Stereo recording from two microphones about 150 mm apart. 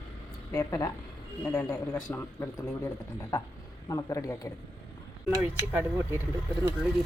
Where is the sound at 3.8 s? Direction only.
25° left (ahead or behind).